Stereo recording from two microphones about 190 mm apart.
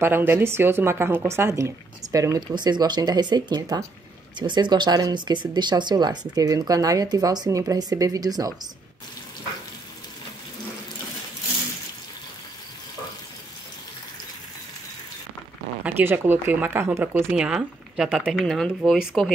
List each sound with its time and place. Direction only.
0.0 s speech: 10° right (ahead or behind)
15.8 s speech: 10° right (ahead or behind)